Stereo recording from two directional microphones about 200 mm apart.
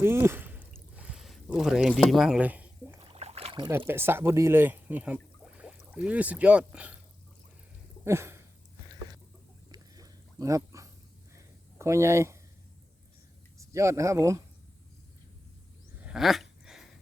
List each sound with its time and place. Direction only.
0.0 s speech: 10° right (ahead or behind)
3.0 s boat: 30° right (ahead or behind)
3.7 s speech: 10° right (ahead or behind)
8.0 s a sound: 15° right (ahead or behind)
9.7 s a sound: 15° right (ahead or behind)
11.8 s speech: 15° right (ahead or behind)
13.6 s speech: 15° right (ahead or behind)
16.0 s dog: centre (ahead or behind)